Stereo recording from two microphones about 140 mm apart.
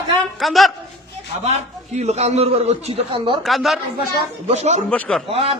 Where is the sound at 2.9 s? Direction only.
40° right (ahead or behind).